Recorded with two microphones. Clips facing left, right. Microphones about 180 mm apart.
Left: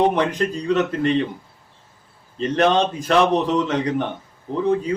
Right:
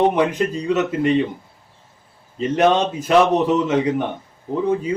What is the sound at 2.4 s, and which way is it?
A man's voice, 10° right (ahead or behind).